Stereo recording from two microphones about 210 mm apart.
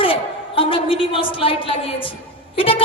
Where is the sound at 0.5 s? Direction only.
25° left (ahead or behind).